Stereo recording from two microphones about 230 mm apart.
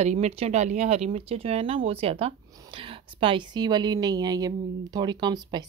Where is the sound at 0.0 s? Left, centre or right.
Right.